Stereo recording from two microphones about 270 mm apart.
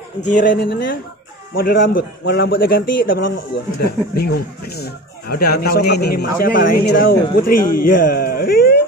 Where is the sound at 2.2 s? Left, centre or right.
Left.